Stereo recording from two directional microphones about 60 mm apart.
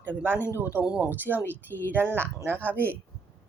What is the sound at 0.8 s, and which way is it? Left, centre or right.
Speech, centre.